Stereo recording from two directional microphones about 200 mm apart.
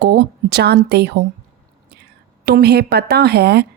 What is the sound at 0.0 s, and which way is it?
A woman's voice, 55° right (ahead or behind).